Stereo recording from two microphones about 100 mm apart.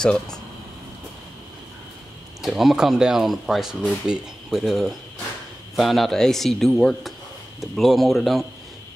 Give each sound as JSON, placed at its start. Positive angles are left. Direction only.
{"t": 0.0, "sound": "speech", "side_deg": 5}
{"t": 2.4, "sound": "speech", "side_deg": -5}